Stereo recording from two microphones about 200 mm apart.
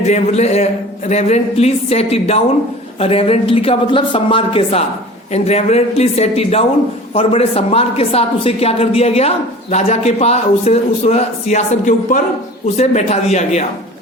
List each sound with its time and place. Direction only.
0.0 s a woman's voice: 35° left (ahead or behind)